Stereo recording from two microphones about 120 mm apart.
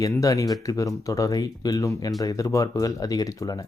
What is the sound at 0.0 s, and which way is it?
Speech, 25° left (ahead or behind).